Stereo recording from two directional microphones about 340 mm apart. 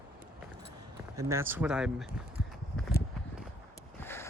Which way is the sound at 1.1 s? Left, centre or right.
Centre.